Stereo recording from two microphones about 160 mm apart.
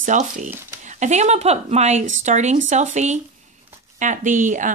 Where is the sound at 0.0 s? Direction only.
50° right (ahead or behind).